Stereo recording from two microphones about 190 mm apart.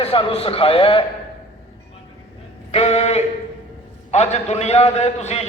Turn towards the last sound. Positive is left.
turn(degrees=35)  # may be behind; listen again after turning